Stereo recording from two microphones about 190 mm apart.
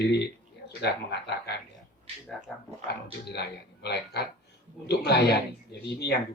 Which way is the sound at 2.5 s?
5° left (ahead or behind).